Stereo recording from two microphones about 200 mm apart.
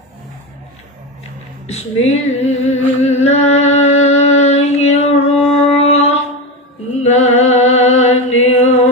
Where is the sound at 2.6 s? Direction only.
35° left (ahead or behind).